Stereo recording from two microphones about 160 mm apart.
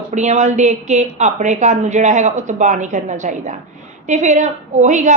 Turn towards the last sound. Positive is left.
turn(degrees=-50)  # may be behind; listen again after turning